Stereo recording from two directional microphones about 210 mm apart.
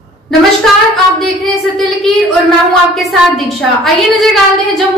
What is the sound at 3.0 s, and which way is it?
Speech, centre (ahead or behind).